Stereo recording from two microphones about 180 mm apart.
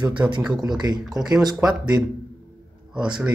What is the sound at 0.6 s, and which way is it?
Speech, 25° right (ahead or behind).